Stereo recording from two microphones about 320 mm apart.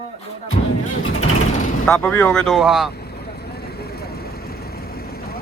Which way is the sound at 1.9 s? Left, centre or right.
Centre.